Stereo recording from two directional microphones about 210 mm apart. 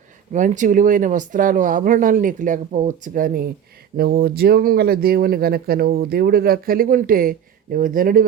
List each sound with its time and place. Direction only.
0.3 s speech: 35° right (ahead or behind)